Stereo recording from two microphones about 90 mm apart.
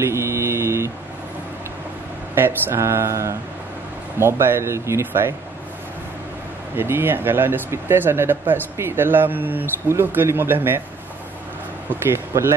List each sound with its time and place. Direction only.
0.0 s mantra: 30° right (ahead or behind)
2.3 s speech: 25° right (ahead or behind)
6.8 s speech: 25° right (ahead or behind)
12.1 s speech: 30° right (ahead or behind)